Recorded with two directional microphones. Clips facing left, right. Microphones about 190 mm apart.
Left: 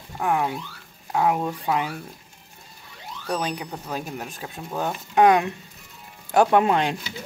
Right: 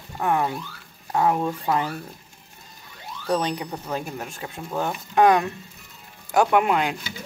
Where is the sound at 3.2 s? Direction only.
5° left (ahead or behind); by 7.0 s 25° left (ahead or behind).